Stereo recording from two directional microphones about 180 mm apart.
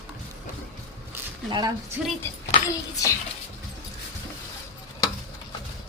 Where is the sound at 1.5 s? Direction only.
25° right (ahead or behind).